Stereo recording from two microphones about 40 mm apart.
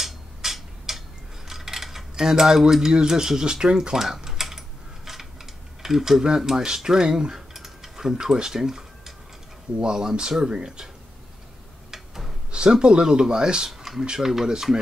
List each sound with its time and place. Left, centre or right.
0.0 s a sound: centre
1.5 s cutlery: centre
5.8 s speech: centre
7.5 s mechanisms: centre
9.8 s speech: centre
11.9 s a sound: centre
12.4 s speech: right
13.7 s speech: centre